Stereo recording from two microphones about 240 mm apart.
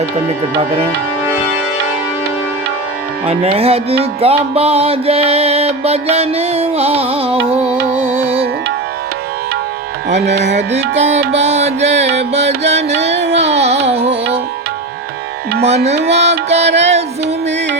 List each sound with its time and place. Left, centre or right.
0.6 s music: right
3.2 s music: right
10.5 s music: right
15.6 s music: right